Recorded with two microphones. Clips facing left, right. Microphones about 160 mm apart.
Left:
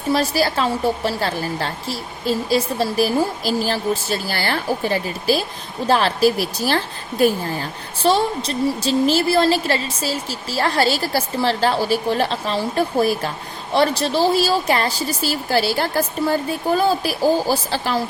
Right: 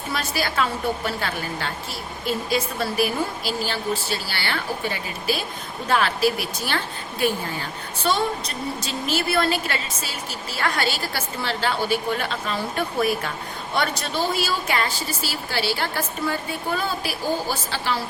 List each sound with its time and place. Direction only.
0.1 s a woman's voice: 35° left (ahead or behind)